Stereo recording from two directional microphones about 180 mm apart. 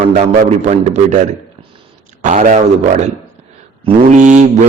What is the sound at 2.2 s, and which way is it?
Speech, 45° right (ahead or behind).